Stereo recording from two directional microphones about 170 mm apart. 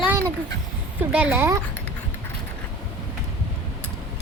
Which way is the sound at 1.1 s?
10° right (ahead or behind).